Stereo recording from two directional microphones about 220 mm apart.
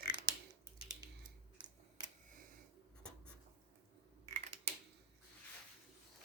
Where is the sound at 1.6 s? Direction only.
20° right (ahead or behind).